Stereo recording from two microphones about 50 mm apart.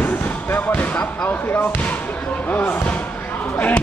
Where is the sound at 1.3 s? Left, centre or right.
Left.